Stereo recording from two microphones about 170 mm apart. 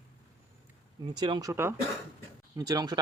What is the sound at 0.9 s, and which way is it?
Speech, 25° right (ahead or behind).